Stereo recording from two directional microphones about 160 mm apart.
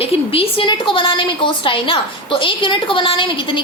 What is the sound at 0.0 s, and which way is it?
A woman's voice, 35° left (ahead or behind).